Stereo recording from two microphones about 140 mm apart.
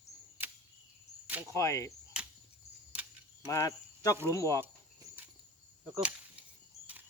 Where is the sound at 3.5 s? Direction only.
20° left (ahead or behind).